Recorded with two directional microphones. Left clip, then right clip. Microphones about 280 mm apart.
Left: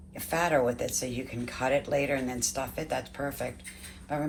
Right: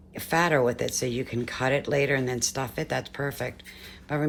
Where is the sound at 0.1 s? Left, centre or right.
Right.